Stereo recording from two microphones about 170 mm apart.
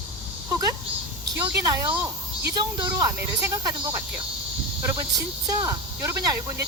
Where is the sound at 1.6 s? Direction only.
25° right (ahead or behind).